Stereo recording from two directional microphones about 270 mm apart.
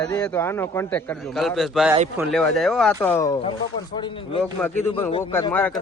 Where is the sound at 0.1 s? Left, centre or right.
Centre.